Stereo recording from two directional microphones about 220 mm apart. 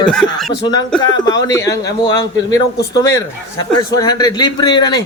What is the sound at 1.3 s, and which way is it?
Speech, 15° left (ahead or behind).